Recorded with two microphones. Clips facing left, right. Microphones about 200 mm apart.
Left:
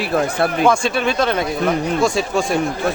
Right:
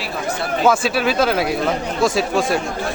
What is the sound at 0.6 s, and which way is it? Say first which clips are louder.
Speech: right 2 dB; 5° right (ahead or behind).